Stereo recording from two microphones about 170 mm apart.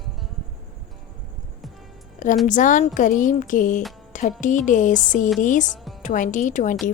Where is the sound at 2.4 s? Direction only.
50° left (ahead or behind).